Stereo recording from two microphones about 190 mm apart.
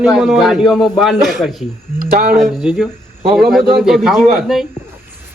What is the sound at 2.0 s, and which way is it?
Speech, 50° right (ahead or behind).